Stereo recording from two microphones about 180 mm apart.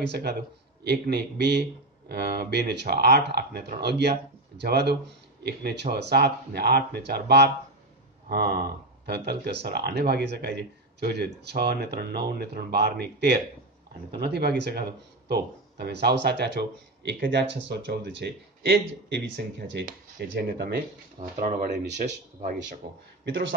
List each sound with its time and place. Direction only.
0.0 s speech: 65° right (ahead or behind)
21.2 s speech: 45° right (ahead or behind)